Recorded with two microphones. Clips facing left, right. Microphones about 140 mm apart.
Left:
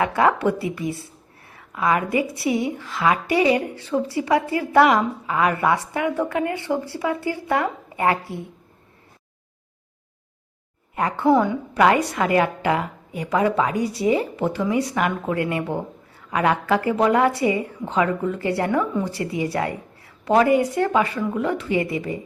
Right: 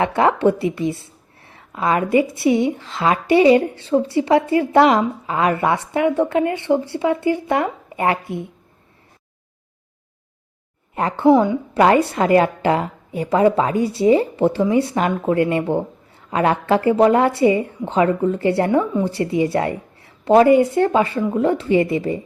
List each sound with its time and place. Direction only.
0.0 s a woman's voice: 25° right (ahead or behind)
10.9 s a woman's voice: 30° right (ahead or behind)